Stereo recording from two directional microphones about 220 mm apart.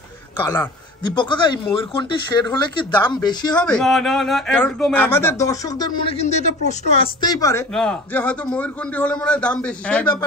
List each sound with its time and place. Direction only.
0.4 s a woman's voice: 10° left (ahead or behind)
1.0 s speech: 20° left (ahead or behind)
3.5 s a man's voice: 5° left (ahead or behind)
6.2 s speech: 30° left (ahead or behind)
7.2 s a woman's voice: 15° left (ahead or behind)
7.7 s a man's voice: 5° left (ahead or behind)